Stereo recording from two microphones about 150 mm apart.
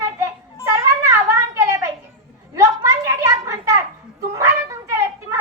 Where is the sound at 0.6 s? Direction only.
15° right (ahead or behind).